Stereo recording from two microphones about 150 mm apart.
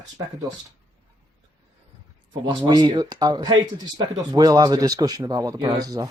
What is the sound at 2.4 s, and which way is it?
Speech, 30° right (ahead or behind).